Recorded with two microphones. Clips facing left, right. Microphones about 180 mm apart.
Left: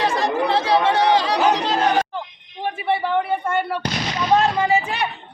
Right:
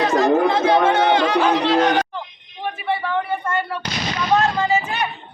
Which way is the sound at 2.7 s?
25° left (ahead or behind).